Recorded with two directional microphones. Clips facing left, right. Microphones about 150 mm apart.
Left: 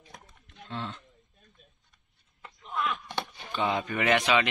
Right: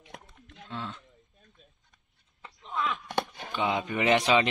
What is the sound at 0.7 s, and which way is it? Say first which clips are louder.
Speech: left 1 dB; 5° right (ahead or behind).